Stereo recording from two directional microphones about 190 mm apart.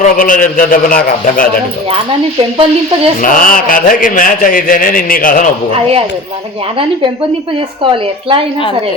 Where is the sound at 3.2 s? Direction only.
45° left (ahead or behind).